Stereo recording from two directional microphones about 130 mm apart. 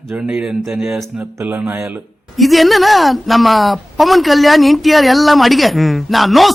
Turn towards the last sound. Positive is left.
turn(degrees=0)  # may be behind; listen again after turning